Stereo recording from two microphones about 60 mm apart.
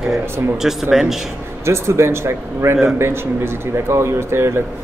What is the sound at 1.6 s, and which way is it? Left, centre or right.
Speech, right.